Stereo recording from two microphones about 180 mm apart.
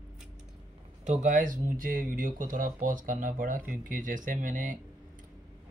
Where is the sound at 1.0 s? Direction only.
45° right (ahead or behind).